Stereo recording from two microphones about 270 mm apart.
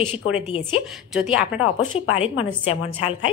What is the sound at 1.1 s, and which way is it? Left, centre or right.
Speech, centre.